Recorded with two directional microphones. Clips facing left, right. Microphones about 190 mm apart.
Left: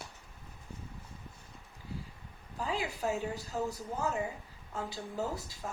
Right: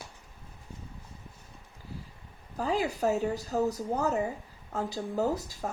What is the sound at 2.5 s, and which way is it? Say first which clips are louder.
Speech: right 6 dB; 40° right (ahead or behind).